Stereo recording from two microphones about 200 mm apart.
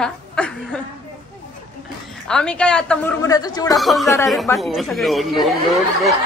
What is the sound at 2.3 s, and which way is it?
Speech, 5° left (ahead or behind).